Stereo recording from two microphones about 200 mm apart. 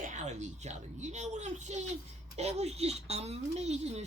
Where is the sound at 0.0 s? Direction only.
35° right (ahead or behind).